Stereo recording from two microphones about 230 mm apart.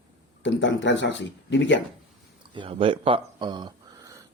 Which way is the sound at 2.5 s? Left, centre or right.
Right.